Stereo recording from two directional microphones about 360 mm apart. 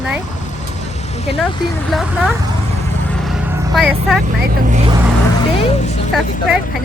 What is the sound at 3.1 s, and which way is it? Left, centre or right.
Vehicle, centre.